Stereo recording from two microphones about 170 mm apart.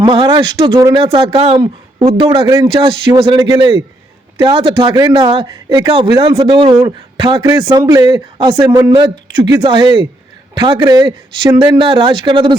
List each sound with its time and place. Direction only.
0.0 s a man's voice: 30° right (ahead or behind)